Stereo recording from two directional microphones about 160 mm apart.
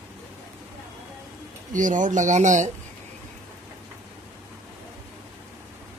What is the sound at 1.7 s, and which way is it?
Speech, 55° right (ahead or behind).